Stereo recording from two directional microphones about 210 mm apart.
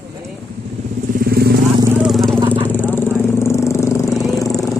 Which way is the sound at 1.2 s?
45° right (ahead or behind).